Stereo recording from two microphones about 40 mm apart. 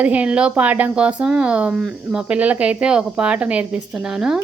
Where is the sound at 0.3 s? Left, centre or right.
Right.